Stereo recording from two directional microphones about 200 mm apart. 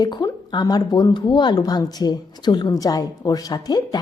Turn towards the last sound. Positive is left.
turn(degrees=20)  # may be behind; listen again after turning